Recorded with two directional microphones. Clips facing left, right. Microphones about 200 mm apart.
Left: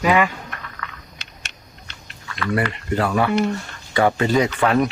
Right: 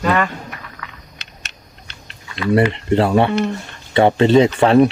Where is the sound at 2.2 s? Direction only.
25° right (ahead or behind).